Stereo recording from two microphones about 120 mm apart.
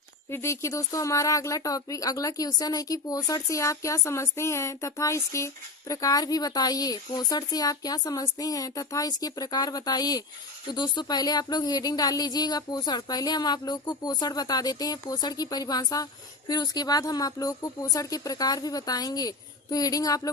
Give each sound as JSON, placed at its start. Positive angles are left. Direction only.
{"t": 0.3, "sound": "speech", "side_deg": 20}